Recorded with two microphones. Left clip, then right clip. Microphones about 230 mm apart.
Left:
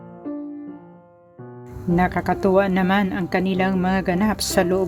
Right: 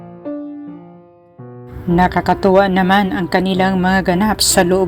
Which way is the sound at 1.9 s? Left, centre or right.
Centre.